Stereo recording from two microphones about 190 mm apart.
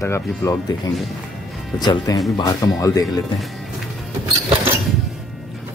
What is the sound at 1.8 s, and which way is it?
Speech, 20° left (ahead or behind).